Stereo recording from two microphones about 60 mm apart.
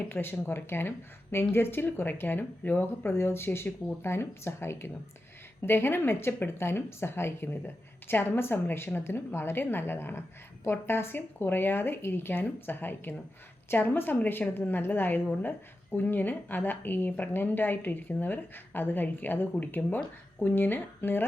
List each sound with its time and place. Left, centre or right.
0.1 s a woman's voice: left